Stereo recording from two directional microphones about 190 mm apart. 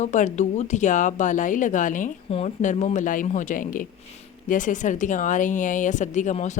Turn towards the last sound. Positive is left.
turn(degrees=40)  # may be behind; listen again after turning